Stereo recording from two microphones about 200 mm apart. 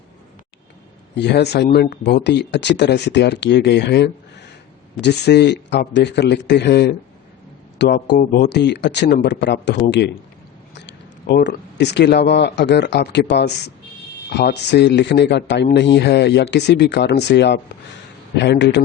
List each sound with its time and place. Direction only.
1.1 s speech: 55° left (ahead or behind)
11.3 s speech: 60° left (ahead or behind)